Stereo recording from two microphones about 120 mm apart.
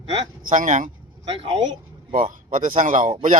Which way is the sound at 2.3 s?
90° right.